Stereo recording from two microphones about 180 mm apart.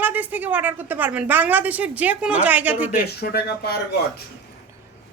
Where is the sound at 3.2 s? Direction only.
65° left (ahead or behind).